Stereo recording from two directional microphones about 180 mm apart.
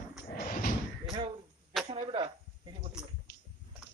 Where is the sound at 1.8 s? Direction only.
30° right (ahead or behind).